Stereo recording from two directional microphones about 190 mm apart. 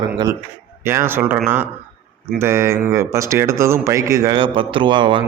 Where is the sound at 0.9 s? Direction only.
10° right (ahead or behind).